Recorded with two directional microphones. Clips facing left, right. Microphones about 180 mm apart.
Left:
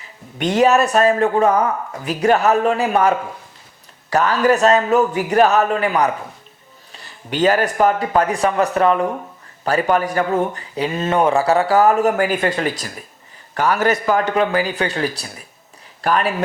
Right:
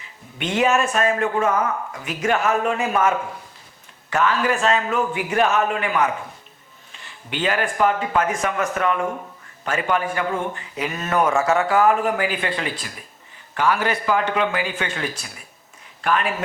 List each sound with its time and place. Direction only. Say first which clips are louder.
0.3 s speech: left 5 dB; 40° left (ahead or behind)